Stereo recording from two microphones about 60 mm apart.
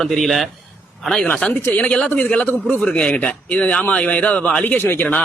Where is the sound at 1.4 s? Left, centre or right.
Centre; by 5.1 s left.